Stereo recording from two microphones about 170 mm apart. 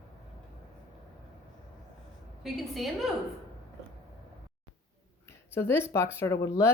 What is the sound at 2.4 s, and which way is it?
Speech, centre (ahead or behind).